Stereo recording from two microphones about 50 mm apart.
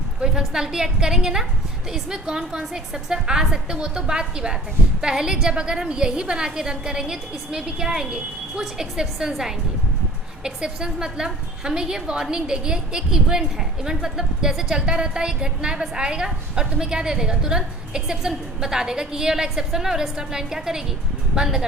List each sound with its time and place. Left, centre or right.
0.2 s a woman's voice: centre